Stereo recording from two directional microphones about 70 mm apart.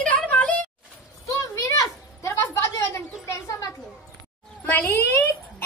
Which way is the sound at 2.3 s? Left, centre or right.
Left.